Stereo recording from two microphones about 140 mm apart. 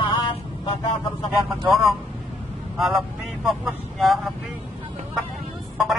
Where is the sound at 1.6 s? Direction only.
Centre (ahead or behind).